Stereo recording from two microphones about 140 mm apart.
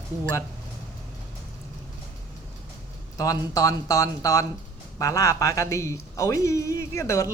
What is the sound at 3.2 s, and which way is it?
A man's voice, 25° left (ahead or behind).